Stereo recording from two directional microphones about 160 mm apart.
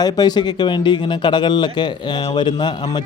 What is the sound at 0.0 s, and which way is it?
Speech, 25° left (ahead or behind).